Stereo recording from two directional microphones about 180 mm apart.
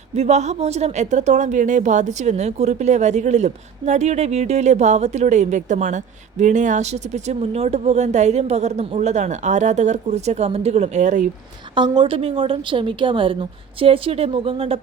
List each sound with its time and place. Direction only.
0.2 s speech: 40° right (ahead or behind)
11.7 s a woman's voice: 25° right (ahead or behind)